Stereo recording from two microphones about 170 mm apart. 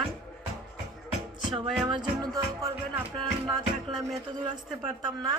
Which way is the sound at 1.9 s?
25° right (ahead or behind).